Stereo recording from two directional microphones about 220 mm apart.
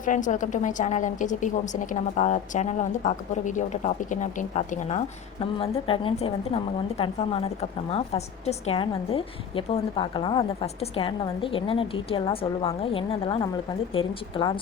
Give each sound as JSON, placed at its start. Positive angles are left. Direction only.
{"t": 0.0, "sound": "a woman's voice", "side_deg": 35}